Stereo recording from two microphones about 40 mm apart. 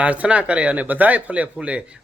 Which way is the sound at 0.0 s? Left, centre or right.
Right.